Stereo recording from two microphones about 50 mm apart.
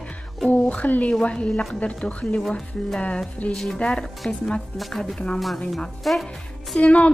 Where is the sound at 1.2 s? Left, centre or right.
Left.